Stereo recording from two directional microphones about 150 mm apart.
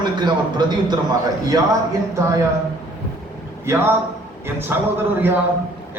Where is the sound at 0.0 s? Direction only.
30° right (ahead or behind).